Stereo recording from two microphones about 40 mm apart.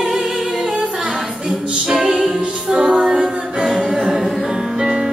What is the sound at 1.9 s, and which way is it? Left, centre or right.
Music, centre.